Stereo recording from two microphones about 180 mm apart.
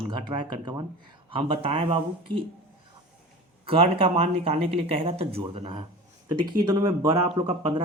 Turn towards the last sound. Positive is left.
turn(degrees=-30)  # may be behind; listen again after turning